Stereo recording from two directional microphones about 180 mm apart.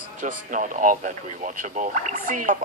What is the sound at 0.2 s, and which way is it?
Speech, 45° right (ahead or behind).